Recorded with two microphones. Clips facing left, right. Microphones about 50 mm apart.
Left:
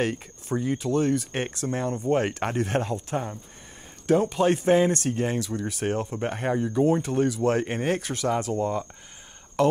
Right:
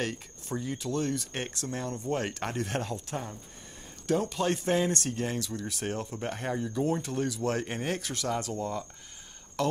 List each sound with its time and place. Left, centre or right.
0.0 s speech: left